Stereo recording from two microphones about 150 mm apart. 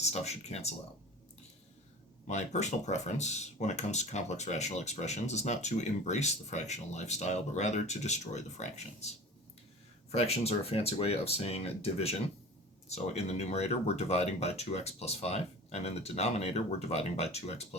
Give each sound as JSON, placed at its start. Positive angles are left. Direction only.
{"t": 0.0, "sound": "speech", "side_deg": 45}
{"t": 2.2, "sound": "speech", "side_deg": 50}